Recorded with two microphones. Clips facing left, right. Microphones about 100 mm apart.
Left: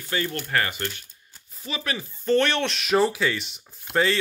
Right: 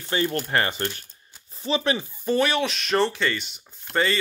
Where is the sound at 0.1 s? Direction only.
25° right (ahead or behind).